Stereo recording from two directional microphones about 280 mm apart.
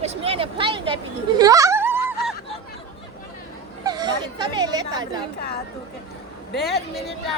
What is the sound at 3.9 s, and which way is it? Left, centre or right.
Speech, centre.